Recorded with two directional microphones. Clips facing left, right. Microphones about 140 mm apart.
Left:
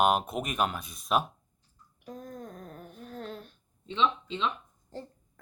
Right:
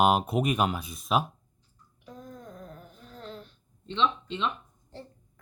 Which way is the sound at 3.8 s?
5° left (ahead or behind).